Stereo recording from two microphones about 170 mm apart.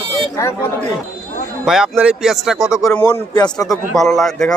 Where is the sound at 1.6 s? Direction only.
Centre (ahead or behind).